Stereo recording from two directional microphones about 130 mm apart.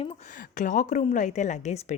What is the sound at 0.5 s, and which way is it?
A woman's voice, 75° left (ahead or behind).